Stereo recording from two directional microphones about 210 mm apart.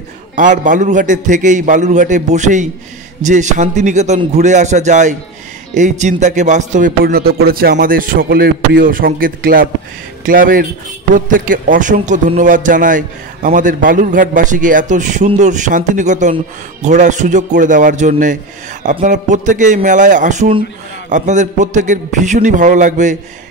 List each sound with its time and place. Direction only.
0.4 s a man's voice: 35° right (ahead or behind)